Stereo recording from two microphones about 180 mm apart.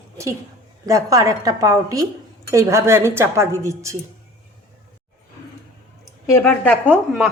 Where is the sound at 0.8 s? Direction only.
20° right (ahead or behind).